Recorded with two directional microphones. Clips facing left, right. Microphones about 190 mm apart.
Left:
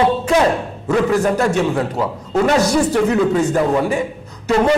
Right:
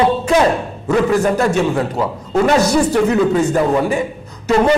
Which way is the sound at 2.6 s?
5° right (ahead or behind).